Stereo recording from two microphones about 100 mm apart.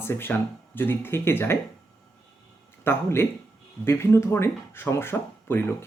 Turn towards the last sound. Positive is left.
turn(degrees=25)  # may be behind; listen again after turning